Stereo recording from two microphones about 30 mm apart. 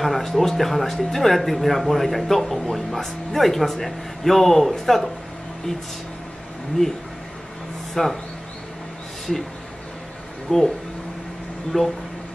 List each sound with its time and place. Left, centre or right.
0.0 s speech: centre
7.9 s speech: centre
10.5 s speech: left
11.7 s speech: left